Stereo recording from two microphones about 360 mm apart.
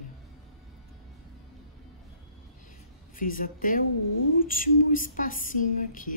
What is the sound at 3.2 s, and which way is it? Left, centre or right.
Speech, left.